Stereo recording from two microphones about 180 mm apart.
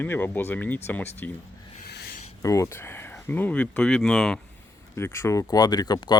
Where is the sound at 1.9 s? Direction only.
65° left (ahead or behind).